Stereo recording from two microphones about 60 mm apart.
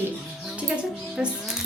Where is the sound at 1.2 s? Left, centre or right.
Centre.